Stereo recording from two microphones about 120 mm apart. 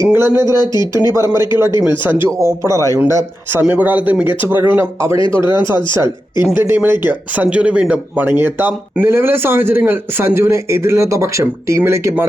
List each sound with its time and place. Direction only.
0.0 s a man's voice: 20° right (ahead or behind)